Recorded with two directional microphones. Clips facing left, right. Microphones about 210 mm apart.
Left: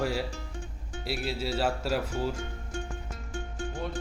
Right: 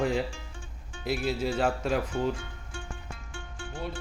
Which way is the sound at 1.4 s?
5° left (ahead or behind).